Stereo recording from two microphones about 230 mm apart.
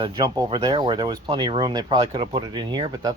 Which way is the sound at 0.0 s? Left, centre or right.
Right.